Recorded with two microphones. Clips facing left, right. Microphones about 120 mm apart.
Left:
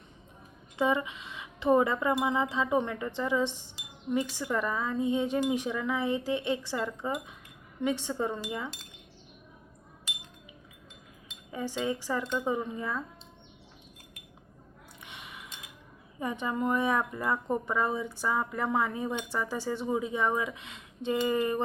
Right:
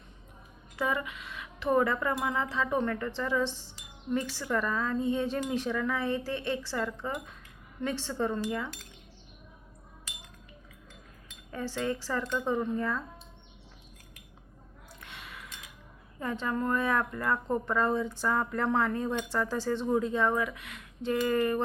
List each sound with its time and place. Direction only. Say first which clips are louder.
0.8 s speech: left 4 dB; 20° left (ahead or behind)
11.3 s speech: left 1 dB; 15° left (ahead or behind)
15.0 s a sound: even; 20° left (ahead or behind)
16.2 s speech: left 1 dB; 15° left (ahead or behind)